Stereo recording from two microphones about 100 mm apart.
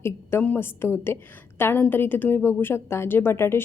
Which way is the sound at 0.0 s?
25° left (ahead or behind).